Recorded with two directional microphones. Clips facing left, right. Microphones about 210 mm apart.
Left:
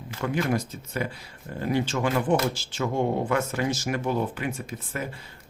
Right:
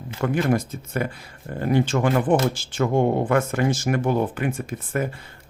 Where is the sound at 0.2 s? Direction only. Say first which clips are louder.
Right 4 dB; 50° right (ahead or behind).